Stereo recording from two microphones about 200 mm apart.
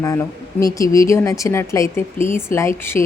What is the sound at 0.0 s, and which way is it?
Speech, 15° left (ahead or behind).